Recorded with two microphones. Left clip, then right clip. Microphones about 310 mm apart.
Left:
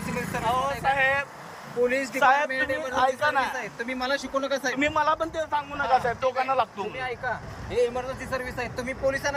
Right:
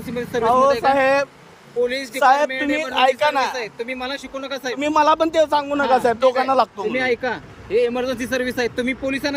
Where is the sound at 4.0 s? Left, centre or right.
Centre.